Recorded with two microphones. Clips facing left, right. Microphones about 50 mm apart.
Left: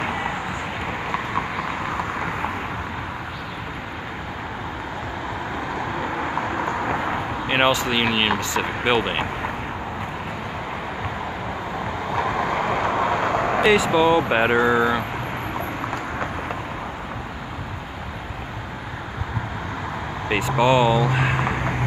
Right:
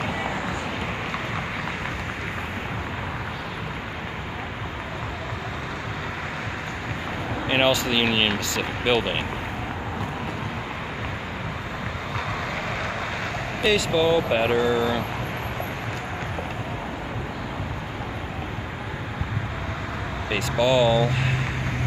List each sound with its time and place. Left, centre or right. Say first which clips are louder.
6.6 s vehicle: left 8 dB; left
7.4 s a sound: left 1 dB; centre
8.1 s speech: left 2 dB; centre
12.1 s vehicle: left 8 dB; centre; by 15.0 s left
20.2 s vehicle: left 5 dB; left
20.5 s speech: left 1 dB; left